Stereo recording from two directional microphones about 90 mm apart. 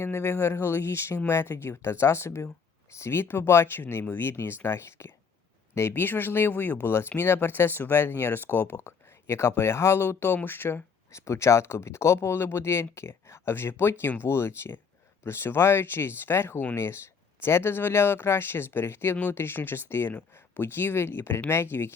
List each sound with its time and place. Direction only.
0.0 s speech: 30° left (ahead or behind)